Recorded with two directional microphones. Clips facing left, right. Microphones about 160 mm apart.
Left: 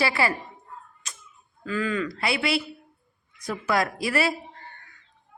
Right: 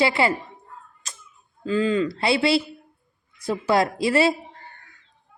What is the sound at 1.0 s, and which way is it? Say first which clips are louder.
Cat: right 2 dB; 35° right (ahead or behind).